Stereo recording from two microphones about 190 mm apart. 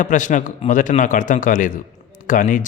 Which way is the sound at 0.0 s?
40° left (ahead or behind).